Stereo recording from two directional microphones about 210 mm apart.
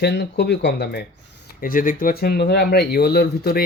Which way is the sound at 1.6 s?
40° left (ahead or behind).